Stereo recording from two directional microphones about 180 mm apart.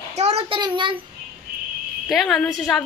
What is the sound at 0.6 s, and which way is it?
Speech, 25° right (ahead or behind).